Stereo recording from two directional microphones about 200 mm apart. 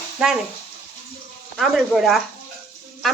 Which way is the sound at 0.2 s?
5° right (ahead or behind).